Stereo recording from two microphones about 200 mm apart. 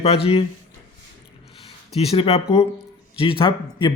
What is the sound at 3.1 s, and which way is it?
Speech, 25° left (ahead or behind).